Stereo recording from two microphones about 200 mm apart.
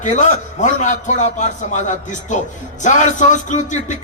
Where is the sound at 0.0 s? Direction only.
40° left (ahead or behind).